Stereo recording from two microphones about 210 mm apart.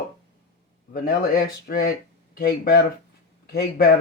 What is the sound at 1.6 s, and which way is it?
Speech, 45° left (ahead or behind).